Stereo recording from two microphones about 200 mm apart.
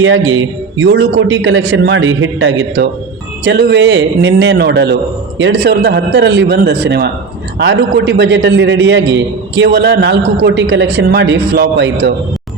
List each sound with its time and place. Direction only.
0.0 s a man's voice: 75° right (ahead or behind)
3.4 s a man's voice: 55° right (ahead or behind)